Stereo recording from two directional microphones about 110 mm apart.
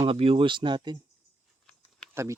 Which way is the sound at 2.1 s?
25° right (ahead or behind).